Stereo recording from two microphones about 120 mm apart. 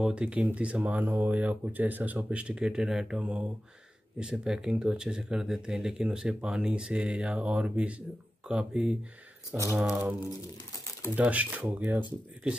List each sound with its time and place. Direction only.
0.0 s speech: 10° right (ahead or behind)
11.1 s speech: 10° right (ahead or behind)